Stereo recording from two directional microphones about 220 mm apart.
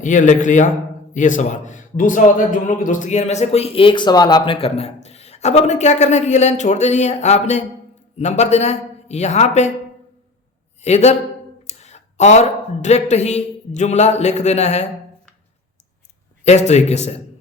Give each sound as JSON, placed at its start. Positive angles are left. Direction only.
{"t": 0.0, "sound": "a man's voice", "side_deg": 35}
{"t": 10.8, "sound": "a man's voice", "side_deg": 30}
{"t": 16.4, "sound": "a man's voice", "side_deg": 30}